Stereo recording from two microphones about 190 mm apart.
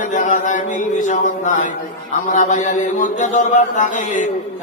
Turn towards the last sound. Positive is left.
turn(degrees=40)  # may be behind; listen again after turning